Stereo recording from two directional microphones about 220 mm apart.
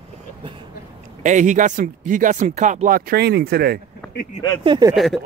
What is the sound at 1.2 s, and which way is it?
Speech, 35° right (ahead or behind).